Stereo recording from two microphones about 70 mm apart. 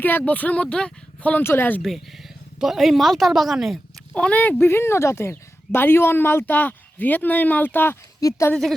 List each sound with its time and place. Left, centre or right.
0.0 s speech: left
1.5 s speech: left
1.8 s a woman's voice: centre
4.1 s speech: centre
8.2 s speech: left